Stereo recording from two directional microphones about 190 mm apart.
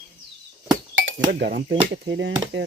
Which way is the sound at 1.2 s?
55° right (ahead or behind).